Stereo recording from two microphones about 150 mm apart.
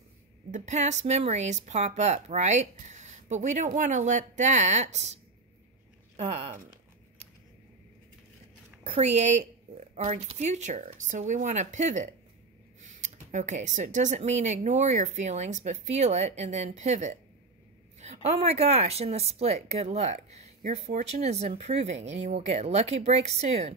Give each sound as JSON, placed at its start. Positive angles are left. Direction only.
{"t": 0.5, "sound": "speech", "side_deg": -55}
{"t": 8.8, "sound": "speech", "side_deg": -45}